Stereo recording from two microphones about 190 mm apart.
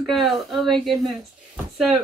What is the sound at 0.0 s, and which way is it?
Speech, centre (ahead or behind).